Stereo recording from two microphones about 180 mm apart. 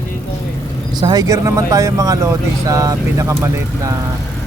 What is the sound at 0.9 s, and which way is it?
Speech, 20° right (ahead or behind).